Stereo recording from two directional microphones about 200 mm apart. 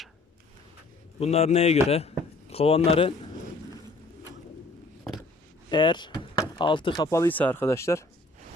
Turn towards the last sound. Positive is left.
turn(degrees=15)  # may be behind; listen again after turning